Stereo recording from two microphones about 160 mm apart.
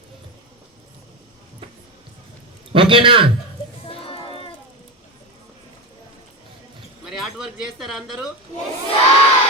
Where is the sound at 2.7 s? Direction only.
35° right (ahead or behind).